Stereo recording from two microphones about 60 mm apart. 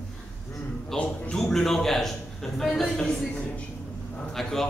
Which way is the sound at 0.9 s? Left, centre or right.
Centre.